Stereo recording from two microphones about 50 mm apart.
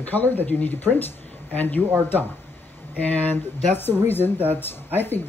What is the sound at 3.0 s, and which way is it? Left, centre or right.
Speech, left.